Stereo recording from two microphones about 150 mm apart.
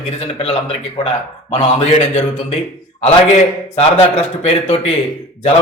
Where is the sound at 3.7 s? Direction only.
40° left (ahead or behind).